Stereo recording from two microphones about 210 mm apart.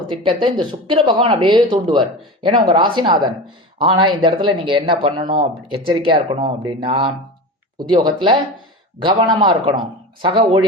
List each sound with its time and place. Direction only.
0.3 s speech: 25° right (ahead or behind)